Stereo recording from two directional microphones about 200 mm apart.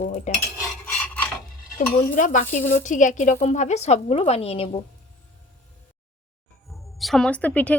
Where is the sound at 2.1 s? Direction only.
40° left (ahead or behind).